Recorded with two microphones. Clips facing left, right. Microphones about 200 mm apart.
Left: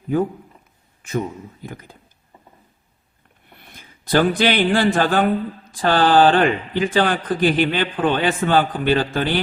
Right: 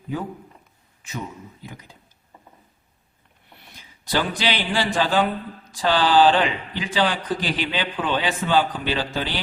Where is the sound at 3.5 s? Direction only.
55° left (ahead or behind).